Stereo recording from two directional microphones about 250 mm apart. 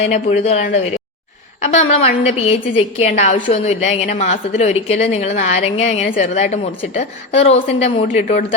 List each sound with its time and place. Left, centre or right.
0.0 s a woman's voice: left